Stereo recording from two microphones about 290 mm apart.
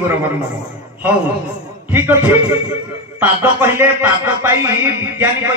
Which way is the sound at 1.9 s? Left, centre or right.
Centre.